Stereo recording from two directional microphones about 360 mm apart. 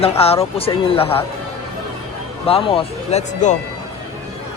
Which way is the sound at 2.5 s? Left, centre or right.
Centre.